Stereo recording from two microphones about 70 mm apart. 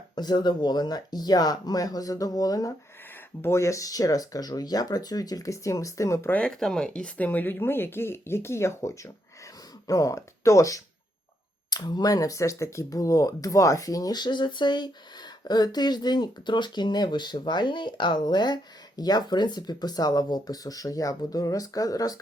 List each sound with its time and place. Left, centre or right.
0.2 s speech: left
3.4 s speech: left
6.4 s speech: centre; by 9.1 s left
9.8 s speech: left
11.9 s speech: left
12.1 s speech: left